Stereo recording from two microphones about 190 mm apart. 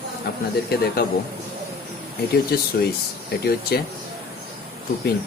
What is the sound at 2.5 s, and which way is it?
Speech, 55° left (ahead or behind).